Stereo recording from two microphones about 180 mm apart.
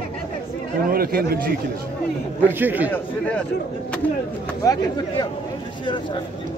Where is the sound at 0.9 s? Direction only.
55° right (ahead or behind).